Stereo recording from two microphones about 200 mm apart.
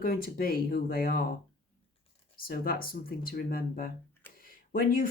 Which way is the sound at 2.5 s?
45° left (ahead or behind).